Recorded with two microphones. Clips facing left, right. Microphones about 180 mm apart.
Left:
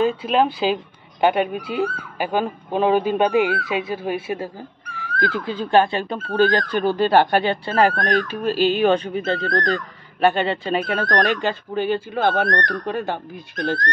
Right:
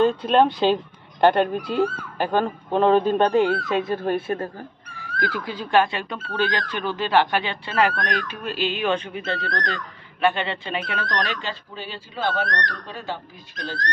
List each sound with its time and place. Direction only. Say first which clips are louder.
0.0 s speech: right 1 dB; 5° left (ahead or behind)
5.2 s speech: left 4 dB; 25° left (ahead or behind)
6.1 s speech: left 8 dB; 45° left (ahead or behind)